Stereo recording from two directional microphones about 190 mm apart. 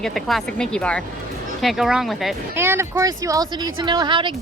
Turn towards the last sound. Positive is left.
turn(degrees=-25)  # may be behind; listen again after turning